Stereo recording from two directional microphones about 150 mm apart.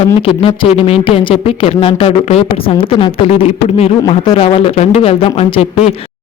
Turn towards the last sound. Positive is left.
turn(degrees=40)  # may be behind; listen again after turning